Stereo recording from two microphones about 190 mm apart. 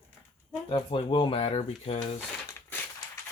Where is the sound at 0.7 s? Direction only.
25° left (ahead or behind).